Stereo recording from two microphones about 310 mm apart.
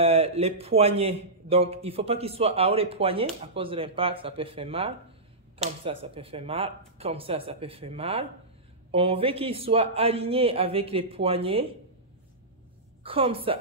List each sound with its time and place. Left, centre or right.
0.0 s a man's voice: centre
13.0 s a man's voice: centre